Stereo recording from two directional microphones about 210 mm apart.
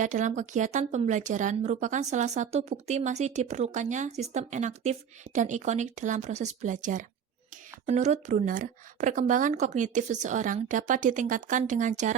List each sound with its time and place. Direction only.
0.0 s a woman's voice: 35° right (ahead or behind)